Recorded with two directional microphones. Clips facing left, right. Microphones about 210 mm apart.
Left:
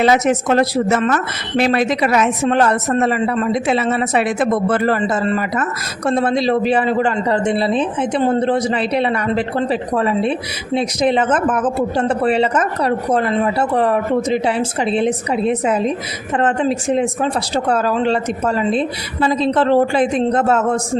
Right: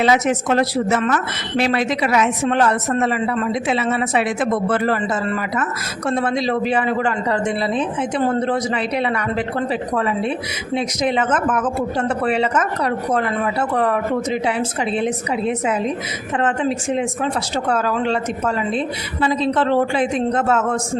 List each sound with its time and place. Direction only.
0.0 s speech: 45° left (ahead or behind)